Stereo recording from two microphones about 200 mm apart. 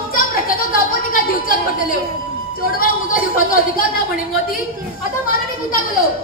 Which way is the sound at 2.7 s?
45° left (ahead or behind).